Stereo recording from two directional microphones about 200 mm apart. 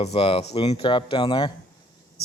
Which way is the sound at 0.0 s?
30° left (ahead or behind).